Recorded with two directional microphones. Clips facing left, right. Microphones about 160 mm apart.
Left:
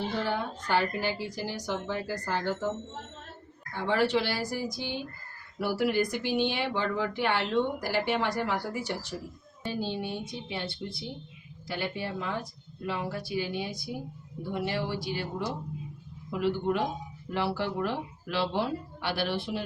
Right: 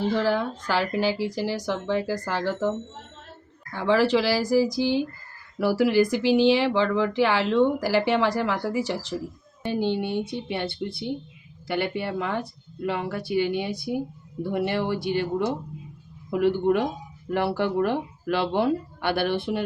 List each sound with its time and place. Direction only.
0.2 s speech: 90° right
9.7 s speech: 65° right (ahead or behind)